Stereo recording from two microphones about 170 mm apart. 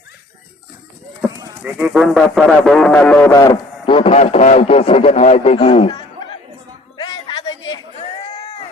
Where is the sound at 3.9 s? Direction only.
35° left (ahead or behind).